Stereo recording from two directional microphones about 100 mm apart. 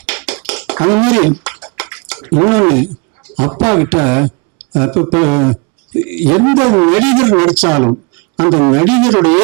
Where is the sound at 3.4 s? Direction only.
20° right (ahead or behind).